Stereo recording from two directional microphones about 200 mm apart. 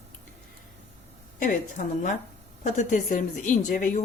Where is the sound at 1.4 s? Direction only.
40° left (ahead or behind).